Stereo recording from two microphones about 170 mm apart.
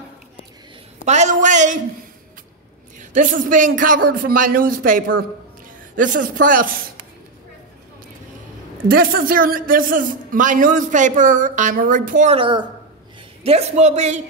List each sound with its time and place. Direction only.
1.0 s a sound: 45° right (ahead or behind)
3.0 s a man's voice: 50° right (ahead or behind)
8.8 s a man's voice: 60° right (ahead or behind)
12.4 s a woman's voice: 30° right (ahead or behind)